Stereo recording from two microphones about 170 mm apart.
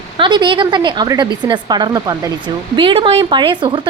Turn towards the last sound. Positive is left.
turn(degrees=-30)  # may be behind; listen again after turning